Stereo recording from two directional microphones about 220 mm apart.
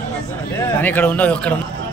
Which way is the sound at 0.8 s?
10° left (ahead or behind).